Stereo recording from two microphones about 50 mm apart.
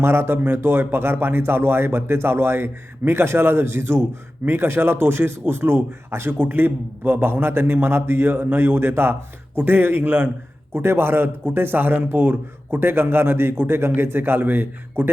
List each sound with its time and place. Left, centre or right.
0.0 s a man's voice: right
6.4 s a man's voice: right